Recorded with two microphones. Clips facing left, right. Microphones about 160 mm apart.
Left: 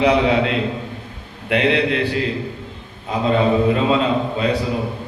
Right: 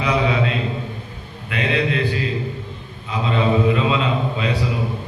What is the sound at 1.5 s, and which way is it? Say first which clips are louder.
Speech: left 4 dB; 65° left (ahead or behind).